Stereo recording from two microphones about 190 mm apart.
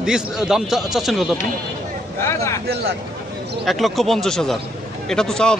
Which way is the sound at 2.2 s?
15° left (ahead or behind).